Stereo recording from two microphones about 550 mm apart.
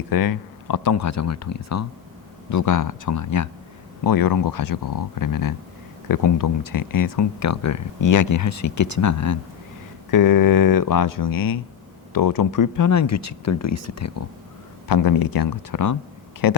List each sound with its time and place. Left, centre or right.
0.1 s speech: left
14.8 s speech: left